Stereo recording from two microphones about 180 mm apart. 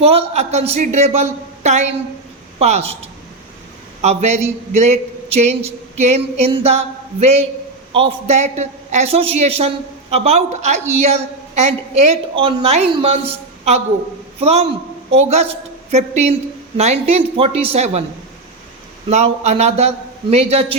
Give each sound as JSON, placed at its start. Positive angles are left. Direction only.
{"t": 0.0, "sound": "a man's voice", "side_deg": -35}
{"t": 19.0, "sound": "a man's voice", "side_deg": -35}